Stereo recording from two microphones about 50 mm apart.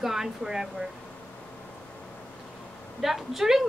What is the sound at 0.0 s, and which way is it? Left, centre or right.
Speech, centre.